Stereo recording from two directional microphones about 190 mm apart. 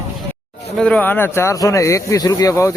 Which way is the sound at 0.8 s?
5° left (ahead or behind).